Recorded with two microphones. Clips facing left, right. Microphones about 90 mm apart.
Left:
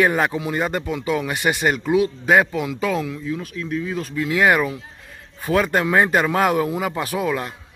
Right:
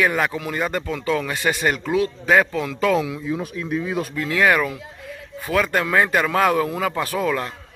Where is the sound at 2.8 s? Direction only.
Centre (ahead or behind).